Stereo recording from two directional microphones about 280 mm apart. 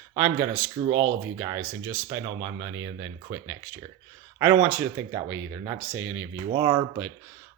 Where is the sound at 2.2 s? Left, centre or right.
Centre.